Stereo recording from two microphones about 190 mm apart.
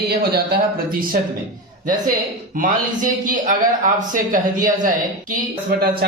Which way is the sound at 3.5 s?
45° right (ahead or behind).